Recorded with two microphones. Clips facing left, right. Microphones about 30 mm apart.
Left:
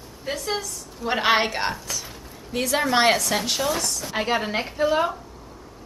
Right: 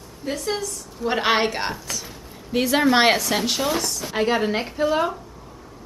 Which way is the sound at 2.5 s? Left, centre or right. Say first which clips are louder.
Right 4 dB; centre.